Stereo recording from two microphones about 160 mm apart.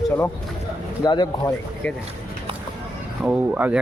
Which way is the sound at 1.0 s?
25° left (ahead or behind).